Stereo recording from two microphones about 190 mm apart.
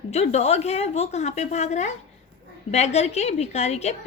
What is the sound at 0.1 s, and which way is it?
A woman's voice, 35° left (ahead or behind).